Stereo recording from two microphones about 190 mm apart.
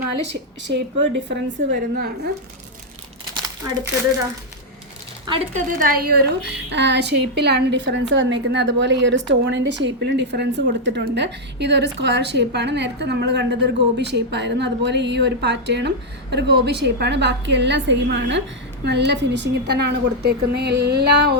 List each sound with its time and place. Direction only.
0.7 s a woman's voice: 70° right (ahead or behind)
5.5 s a woman's voice: 50° right (ahead or behind)